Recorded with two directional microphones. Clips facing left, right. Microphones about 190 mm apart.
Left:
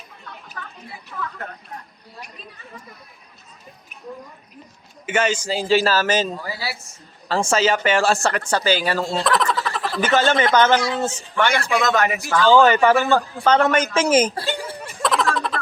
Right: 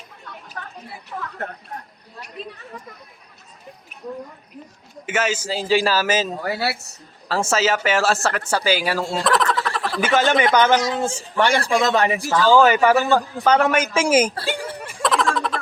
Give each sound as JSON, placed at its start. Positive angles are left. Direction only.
{"t": 2.4, "sound": "speech", "side_deg": -75}
{"t": 5.0, "sound": "a man's voice", "side_deg": -5}
{"t": 6.4, "sound": "speech", "side_deg": -65}
{"t": 7.3, "sound": "speech", "side_deg": -5}
{"t": 10.4, "sound": "a man's voice", "side_deg": -15}
{"t": 11.3, "sound": "a man's voice", "side_deg": -35}
{"t": 12.5, "sound": "a man's voice", "side_deg": -10}
{"t": 14.8, "sound": "a sound", "side_deg": -5}